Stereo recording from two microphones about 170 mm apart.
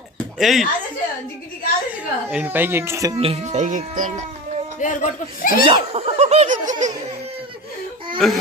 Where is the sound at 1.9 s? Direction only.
10° right (ahead or behind).